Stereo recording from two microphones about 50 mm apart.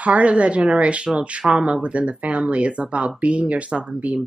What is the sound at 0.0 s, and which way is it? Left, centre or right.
Speech, right.